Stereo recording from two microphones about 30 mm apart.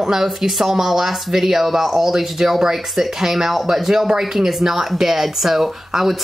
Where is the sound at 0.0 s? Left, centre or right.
Centre.